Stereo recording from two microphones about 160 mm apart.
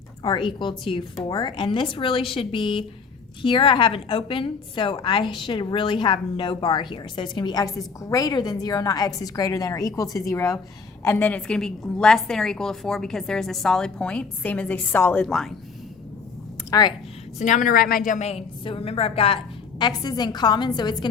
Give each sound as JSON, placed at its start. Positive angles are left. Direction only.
{"t": 0.2, "sound": "a woman's voice", "side_deg": 30}
{"t": 16.7, "sound": "a woman's voice", "side_deg": 25}
{"t": 17.3, "sound": "a woman's voice", "side_deg": 50}
{"t": 19.8, "sound": "a woman's voice", "side_deg": 25}